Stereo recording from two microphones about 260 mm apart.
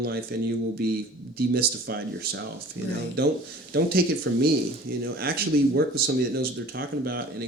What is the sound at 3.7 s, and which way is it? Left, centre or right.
Speech, right.